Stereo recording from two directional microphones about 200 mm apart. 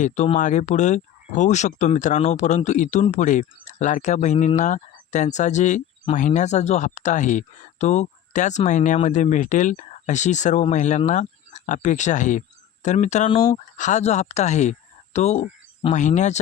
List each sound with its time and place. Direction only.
0.0 s speech: 35° left (ahead or behind)
13.7 s speech: 35° left (ahead or behind)